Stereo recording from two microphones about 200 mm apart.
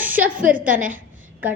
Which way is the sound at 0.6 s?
40° right (ahead or behind).